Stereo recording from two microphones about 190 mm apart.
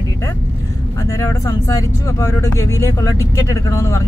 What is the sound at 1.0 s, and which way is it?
Speech, 15° left (ahead or behind).